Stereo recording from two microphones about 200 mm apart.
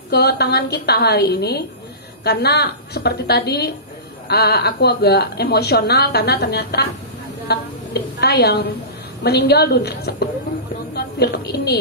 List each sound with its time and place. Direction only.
0.1 s a woman's voice: 55° left (ahead or behind)